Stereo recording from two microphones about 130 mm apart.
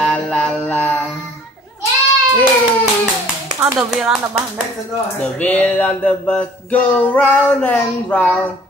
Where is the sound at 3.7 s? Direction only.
5° right (ahead or behind).